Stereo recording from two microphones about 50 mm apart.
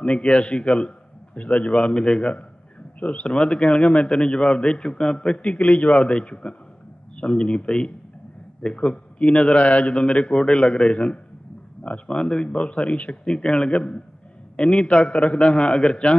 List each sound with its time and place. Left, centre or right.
0.0 s a man's voice: left